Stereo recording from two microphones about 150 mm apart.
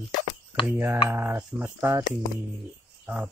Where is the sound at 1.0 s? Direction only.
15° right (ahead or behind).